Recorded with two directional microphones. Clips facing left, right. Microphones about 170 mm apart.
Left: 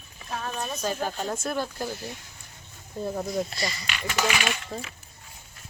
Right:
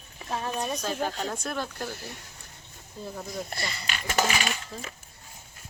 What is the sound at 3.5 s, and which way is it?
Speech, 55° right (ahead or behind).